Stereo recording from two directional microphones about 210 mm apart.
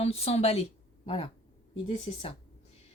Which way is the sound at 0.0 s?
30° left (ahead or behind).